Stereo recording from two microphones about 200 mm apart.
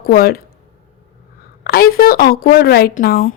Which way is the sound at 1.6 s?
50° left (ahead or behind).